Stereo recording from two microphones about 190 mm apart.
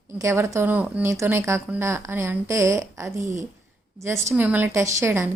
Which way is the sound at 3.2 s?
40° right (ahead or behind).